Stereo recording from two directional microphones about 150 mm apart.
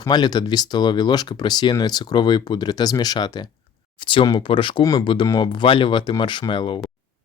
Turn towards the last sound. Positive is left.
turn(degrees=35)  # may be behind; listen again after turning